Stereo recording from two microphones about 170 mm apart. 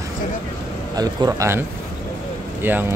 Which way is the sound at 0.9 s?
20° right (ahead or behind).